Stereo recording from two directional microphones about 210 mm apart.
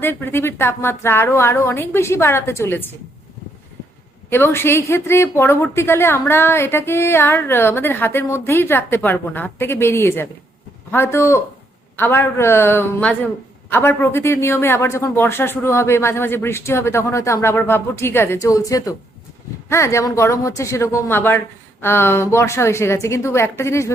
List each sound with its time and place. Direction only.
0.0 s a woman's voice: 10° left (ahead or behind)
4.3 s a woman's voice: 10° left (ahead or behind)